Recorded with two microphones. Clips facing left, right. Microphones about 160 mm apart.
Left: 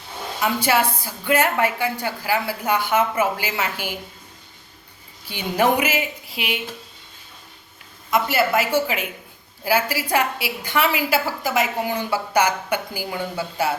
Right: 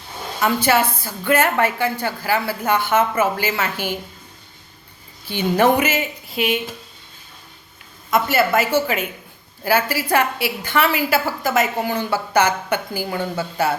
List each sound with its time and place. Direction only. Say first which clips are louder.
0.4 s a woman's voice: right 2 dB; 10° left (ahead or behind)
5.3 s a woman's voice: right 3 dB; 10° left (ahead or behind)
6.3 s speech: right 8 dB; 45° right (ahead or behind)
8.1 s a woman's voice: right 2 dB; 10° left (ahead or behind)